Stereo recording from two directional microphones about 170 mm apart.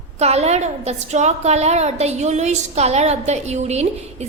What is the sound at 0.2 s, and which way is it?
A woman's voice, 40° right (ahead or behind).